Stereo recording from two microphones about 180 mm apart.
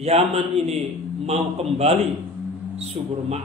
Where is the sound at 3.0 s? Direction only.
40° right (ahead or behind).